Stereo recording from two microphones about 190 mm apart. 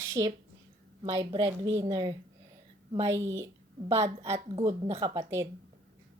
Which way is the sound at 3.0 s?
15° right (ahead or behind).